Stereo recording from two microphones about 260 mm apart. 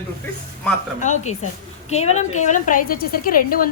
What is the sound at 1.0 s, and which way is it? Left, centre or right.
A woman's voice, left.